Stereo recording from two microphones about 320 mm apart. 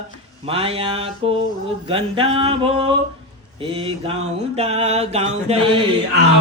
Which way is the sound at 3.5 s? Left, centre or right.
Centre.